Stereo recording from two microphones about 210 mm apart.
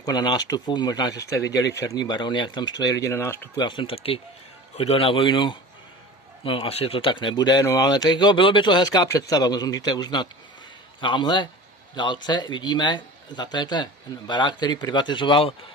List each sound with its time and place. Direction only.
0.0 s speech: 20° left (ahead or behind)
3.6 s speech: 25° left (ahead or behind)